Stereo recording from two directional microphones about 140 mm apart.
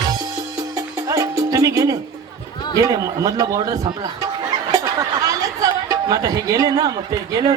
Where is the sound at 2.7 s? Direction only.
25° right (ahead or behind).